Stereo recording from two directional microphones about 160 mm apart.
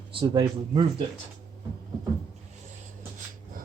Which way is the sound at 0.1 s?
30° right (ahead or behind).